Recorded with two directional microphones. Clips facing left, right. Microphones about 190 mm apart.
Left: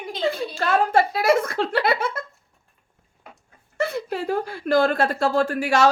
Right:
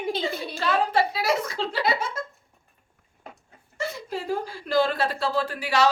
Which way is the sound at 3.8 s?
60° left (ahead or behind).